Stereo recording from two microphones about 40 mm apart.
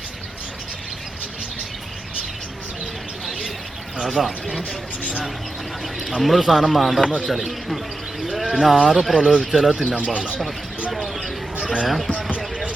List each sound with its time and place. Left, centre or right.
4.0 s speech: centre
5.8 s speech: centre
10.0 s speech: right
11.0 s a sound: centre
11.9 s speech: centre